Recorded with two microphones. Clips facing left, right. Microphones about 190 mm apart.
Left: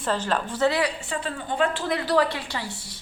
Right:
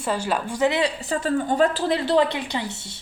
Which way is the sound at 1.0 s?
40° right (ahead or behind).